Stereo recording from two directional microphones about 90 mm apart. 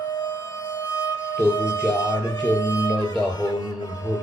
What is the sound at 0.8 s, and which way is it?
Speech, 45° left (ahead or behind).